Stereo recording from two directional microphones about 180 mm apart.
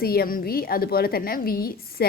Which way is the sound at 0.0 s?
60° left (ahead or behind).